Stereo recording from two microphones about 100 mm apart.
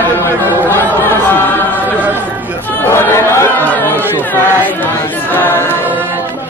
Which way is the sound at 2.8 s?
25° left (ahead or behind).